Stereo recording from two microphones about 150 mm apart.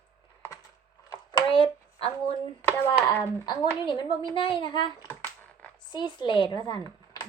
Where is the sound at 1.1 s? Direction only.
30° left (ahead or behind).